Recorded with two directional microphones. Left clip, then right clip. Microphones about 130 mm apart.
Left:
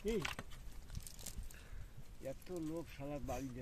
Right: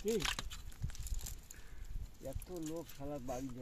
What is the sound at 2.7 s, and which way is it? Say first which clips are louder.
Speech: right 1 dB; 5° right (ahead or behind).